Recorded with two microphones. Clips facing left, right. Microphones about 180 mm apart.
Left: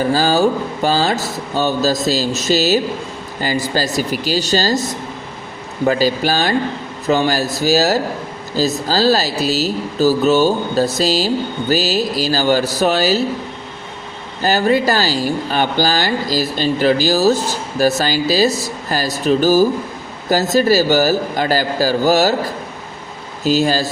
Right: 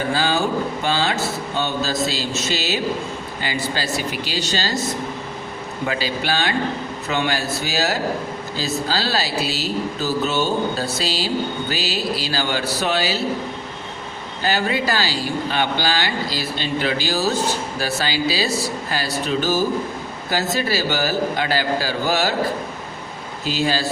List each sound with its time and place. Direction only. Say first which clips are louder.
0.1 s speech: left 4 dB; 40° left (ahead or behind)
5.9 s speech: left 8 dB; 40° left (ahead or behind)
14.4 s speech: left 7 dB; 45° left (ahead or behind)
23.4 s speech: left 6 dB; 40° left (ahead or behind)